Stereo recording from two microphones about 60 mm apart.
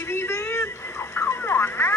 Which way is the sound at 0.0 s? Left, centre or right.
Left.